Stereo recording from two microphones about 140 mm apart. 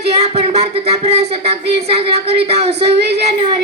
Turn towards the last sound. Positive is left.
turn(degrees=-50)  # may be behind; listen again after turning